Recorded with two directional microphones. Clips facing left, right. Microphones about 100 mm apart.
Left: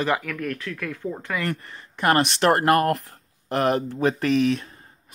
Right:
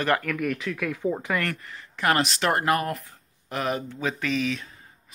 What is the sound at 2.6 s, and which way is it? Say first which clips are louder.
Speech: left 5 dB; 50° left (ahead or behind).